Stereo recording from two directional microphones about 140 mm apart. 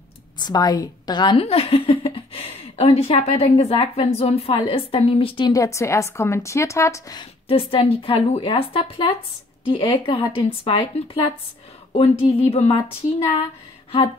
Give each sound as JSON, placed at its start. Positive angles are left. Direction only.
{"t": 0.4, "sound": "a woman's voice", "side_deg": 30}
{"t": 5.5, "sound": "a woman's voice", "side_deg": 20}
{"t": 7.2, "sound": "a woman's voice", "side_deg": 40}
{"t": 11.9, "sound": "a woman's voice", "side_deg": 50}